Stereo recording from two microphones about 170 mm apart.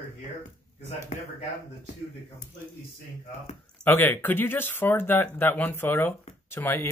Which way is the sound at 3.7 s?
10° left (ahead or behind).